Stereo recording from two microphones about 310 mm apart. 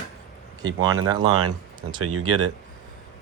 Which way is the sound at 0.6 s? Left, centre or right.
Right.